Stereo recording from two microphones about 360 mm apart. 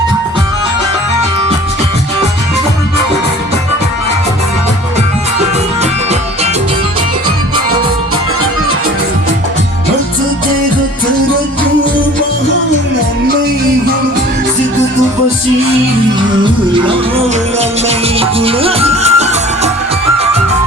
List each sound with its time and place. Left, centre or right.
16.4 s music: centre